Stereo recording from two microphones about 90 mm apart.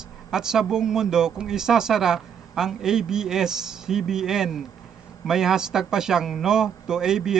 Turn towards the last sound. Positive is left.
turn(degrees=-5)  # may be behind; listen again after turning